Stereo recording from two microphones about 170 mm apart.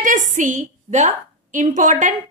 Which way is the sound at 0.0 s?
50° right (ahead or behind).